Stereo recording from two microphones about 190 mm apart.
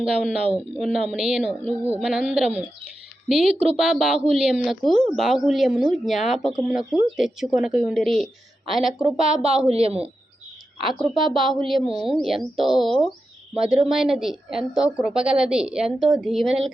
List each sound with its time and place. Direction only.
0.3 s a woman's voice: 5° right (ahead or behind)
9.0 s speech: 30° right (ahead or behind)
10.8 s a woman's voice: centre (ahead or behind)